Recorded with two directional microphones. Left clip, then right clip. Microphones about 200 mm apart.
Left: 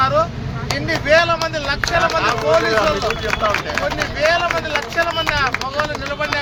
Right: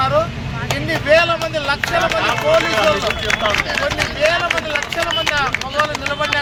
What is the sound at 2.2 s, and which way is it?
Speech, 25° left (ahead or behind).